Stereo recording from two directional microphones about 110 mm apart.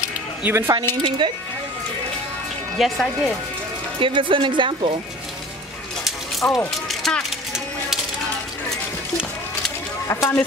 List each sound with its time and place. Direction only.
0.4 s speech: 20° right (ahead or behind)
1.0 s speech: 45° right (ahead or behind)
2.8 s speech: centre (ahead or behind)
4.0 s speech: 50° right (ahead or behind)
6.4 s speech: 10° left (ahead or behind)
6.9 s a sound: 5° left (ahead or behind)
10.0 s speech: 25° left (ahead or behind)